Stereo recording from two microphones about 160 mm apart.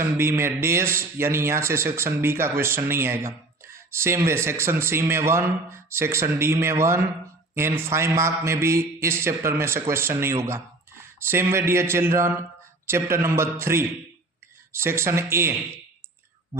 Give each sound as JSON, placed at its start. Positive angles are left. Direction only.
{"t": 0.0, "sound": "speech", "side_deg": -15}